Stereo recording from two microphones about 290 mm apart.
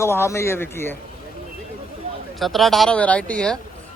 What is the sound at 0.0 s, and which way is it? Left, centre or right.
Speech, centre.